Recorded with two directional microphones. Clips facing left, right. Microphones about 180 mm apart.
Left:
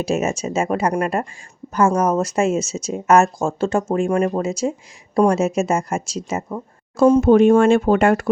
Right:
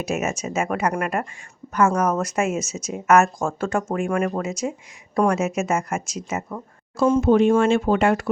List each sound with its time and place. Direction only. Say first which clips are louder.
0.0 s speech: left 4 dB; 30° left (ahead or behind)
6.9 s speech: left 5 dB; 45° left (ahead or behind)